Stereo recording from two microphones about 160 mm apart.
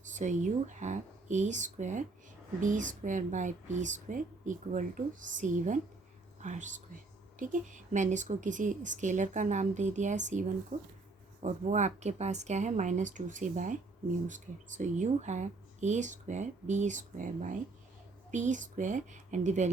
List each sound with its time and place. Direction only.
0.0 s speech: 50° right (ahead or behind)